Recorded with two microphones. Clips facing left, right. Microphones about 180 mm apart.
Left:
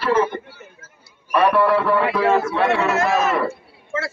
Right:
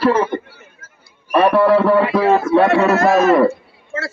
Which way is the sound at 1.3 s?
30° right (ahead or behind).